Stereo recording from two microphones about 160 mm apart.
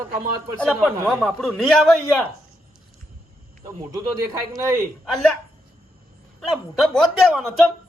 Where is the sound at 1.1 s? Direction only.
Centre (ahead or behind).